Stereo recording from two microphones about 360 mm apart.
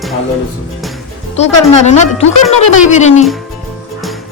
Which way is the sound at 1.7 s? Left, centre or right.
Centre.